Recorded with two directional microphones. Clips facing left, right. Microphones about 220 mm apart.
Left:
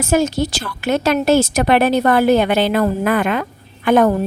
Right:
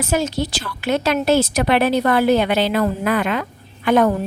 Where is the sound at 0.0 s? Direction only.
45° left (ahead or behind).